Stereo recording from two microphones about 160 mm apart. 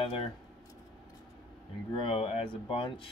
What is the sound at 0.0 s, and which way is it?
Speech, 35° left (ahead or behind).